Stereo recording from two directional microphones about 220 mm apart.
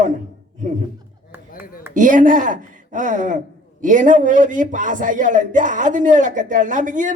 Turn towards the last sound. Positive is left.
turn(degrees=-35)  # may be behind; listen again after turning